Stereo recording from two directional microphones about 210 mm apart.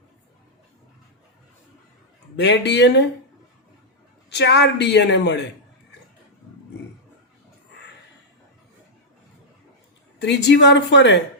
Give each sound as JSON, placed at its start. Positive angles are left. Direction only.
{"t": 2.3, "sound": "a woman's voice", "side_deg": 55}
{"t": 4.3, "sound": "a woman's voice", "side_deg": 55}
{"t": 10.2, "sound": "a woman's voice", "side_deg": 55}